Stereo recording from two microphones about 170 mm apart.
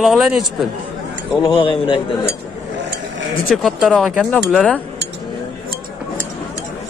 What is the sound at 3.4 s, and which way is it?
Speech, centre (ahead or behind).